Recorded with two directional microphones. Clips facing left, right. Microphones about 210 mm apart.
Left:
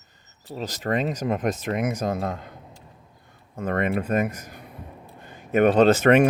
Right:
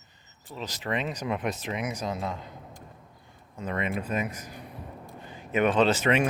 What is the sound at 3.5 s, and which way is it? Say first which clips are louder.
Speech: left 6 dB; 50° left (ahead or behind).